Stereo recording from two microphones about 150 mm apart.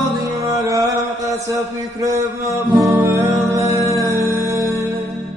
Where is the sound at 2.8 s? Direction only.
20° right (ahead or behind).